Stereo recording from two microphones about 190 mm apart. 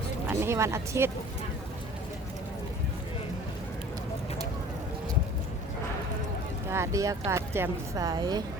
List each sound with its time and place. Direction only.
0.3 s speech: 15° right (ahead or behind)
6.7 s speech: 15° right (ahead or behind)